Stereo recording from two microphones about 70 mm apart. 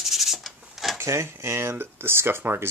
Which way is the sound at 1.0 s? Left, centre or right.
Right.